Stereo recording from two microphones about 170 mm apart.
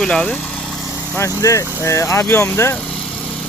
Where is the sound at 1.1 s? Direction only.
20° left (ahead or behind).